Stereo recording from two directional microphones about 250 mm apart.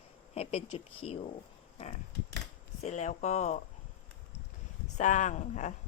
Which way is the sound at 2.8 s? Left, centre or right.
Left.